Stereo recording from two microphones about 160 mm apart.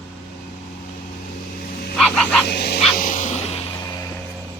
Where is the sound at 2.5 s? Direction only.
90° left.